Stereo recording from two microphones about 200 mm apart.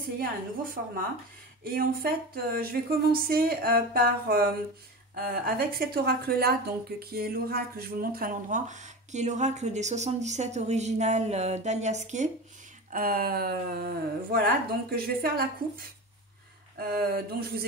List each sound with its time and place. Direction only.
0.2 s a woman's voice: 45° right (ahead or behind)
12.9 s speech: 45° right (ahead or behind)
16.7 s speech: 50° right (ahead or behind)